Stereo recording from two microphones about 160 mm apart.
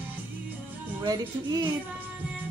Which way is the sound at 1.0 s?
25° right (ahead or behind).